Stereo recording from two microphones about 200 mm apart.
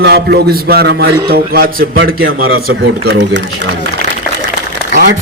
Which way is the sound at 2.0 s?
55° right (ahead or behind).